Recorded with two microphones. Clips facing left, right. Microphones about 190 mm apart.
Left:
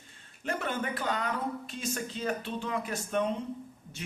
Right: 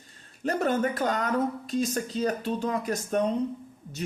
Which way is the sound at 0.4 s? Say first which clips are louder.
Right 8 dB; 40° right (ahead or behind).